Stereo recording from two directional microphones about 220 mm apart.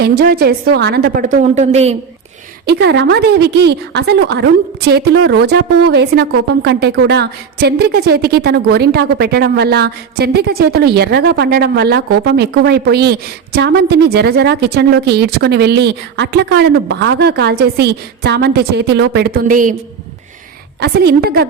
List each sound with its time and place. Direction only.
0.0 s a woman's voice: 45° right (ahead or behind); by 2.0 s 30° right (ahead or behind)
2.6 s a woman's voice: 50° right (ahead or behind)
20.8 s a woman's voice: 50° right (ahead or behind)